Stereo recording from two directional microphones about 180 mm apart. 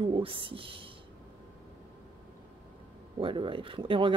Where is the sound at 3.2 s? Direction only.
30° right (ahead or behind).